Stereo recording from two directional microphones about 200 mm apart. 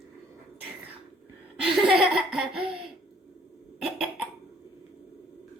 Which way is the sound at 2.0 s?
Centre (ahead or behind).